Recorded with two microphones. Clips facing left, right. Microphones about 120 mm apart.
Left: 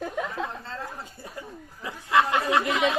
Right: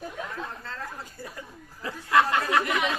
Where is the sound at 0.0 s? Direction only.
90° left.